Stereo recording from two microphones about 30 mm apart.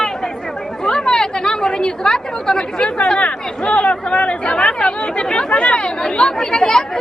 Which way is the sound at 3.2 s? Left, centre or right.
Left.